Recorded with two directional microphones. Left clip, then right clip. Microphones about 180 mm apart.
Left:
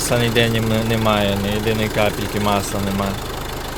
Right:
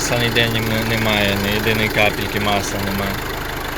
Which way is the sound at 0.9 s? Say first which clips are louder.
Right 1 dB; 15° left (ahead or behind).